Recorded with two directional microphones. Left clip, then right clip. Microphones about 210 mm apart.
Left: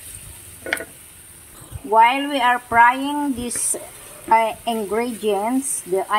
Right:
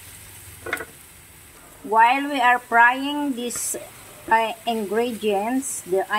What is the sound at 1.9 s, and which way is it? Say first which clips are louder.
Speech: left 2 dB; centre (ahead or behind).